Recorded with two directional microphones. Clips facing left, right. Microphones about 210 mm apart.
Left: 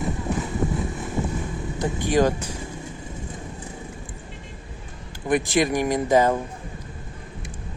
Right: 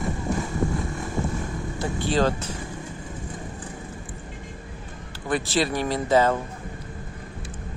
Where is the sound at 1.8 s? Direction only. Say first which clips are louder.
Left 3 dB; 15° left (ahead or behind).